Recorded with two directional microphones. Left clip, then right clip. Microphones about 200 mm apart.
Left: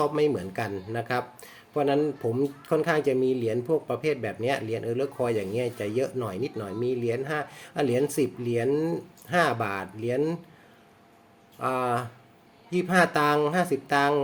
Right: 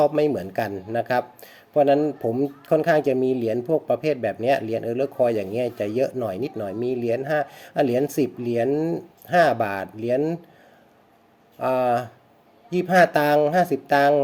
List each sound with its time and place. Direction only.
0.0 s speech: 20° right (ahead or behind)
11.6 s speech: 20° right (ahead or behind)